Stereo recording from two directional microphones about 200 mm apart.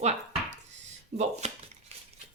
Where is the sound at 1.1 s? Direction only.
35° right (ahead or behind).